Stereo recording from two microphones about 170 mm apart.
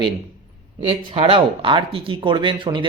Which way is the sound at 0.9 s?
35° right (ahead or behind).